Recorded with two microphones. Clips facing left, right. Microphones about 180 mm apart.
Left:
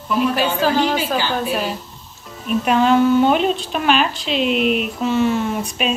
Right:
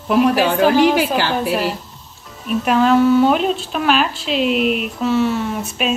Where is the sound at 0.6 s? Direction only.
10° right (ahead or behind).